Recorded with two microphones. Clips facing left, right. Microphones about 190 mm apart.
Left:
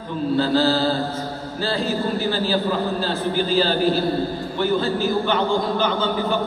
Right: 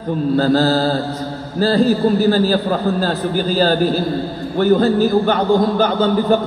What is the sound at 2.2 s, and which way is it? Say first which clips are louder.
A man's voice: right 7 dB; 45° right (ahead or behind).